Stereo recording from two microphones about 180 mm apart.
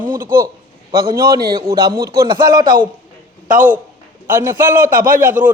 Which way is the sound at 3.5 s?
45° right (ahead or behind).